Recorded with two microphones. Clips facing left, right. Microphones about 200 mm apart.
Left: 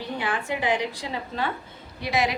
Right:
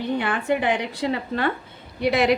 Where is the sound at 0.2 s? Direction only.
60° right (ahead or behind).